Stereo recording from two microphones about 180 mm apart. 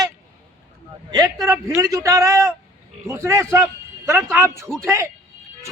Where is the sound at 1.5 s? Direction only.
15° right (ahead or behind).